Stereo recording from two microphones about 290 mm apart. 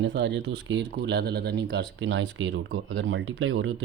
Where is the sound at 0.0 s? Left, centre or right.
Right.